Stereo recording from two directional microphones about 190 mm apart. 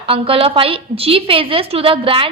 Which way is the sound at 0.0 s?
30° right (ahead or behind).